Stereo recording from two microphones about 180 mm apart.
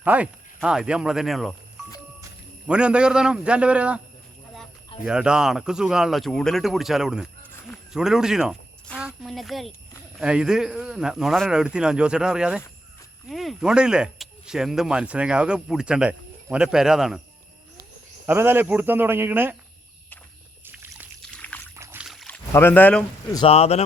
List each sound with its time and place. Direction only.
0.0 s speech: 10° right (ahead or behind)
2.6 s speech: 5° right (ahead or behind)
5.0 s speech: 5° right (ahead or behind)
18.3 s speech: 10° right (ahead or behind)
20.7 s a sound: 10° right (ahead or behind)
21.2 s pour: 5° left (ahead or behind)
21.8 s boat: 5° right (ahead or behind)
22.5 s speech: 10° left (ahead or behind)
23.3 s speech: 30° left (ahead or behind)